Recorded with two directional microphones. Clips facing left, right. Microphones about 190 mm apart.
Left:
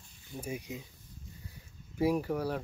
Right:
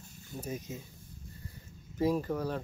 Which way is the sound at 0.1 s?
45° right (ahead or behind).